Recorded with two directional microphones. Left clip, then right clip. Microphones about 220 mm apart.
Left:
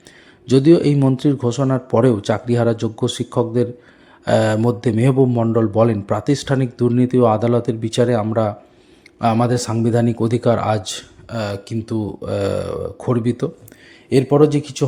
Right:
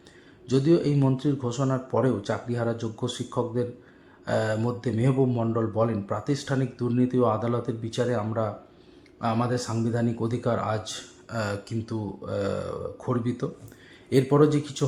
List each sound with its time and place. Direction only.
0.4 s speech: 35° left (ahead or behind)